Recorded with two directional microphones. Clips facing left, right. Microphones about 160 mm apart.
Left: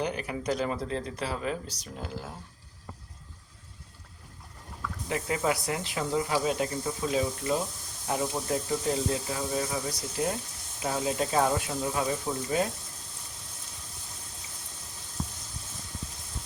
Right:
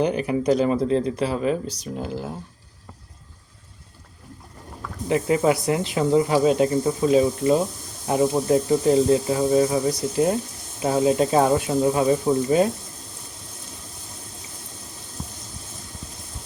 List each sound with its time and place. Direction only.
0.0 s speech: 20° right (ahead or behind)
5.0 s speech: 25° right (ahead or behind)